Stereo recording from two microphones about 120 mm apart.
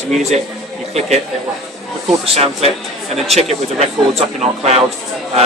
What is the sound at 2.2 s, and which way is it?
Speech, 60° right (ahead or behind).